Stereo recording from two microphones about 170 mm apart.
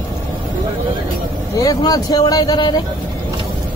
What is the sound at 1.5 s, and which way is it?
Speech, 20° left (ahead or behind).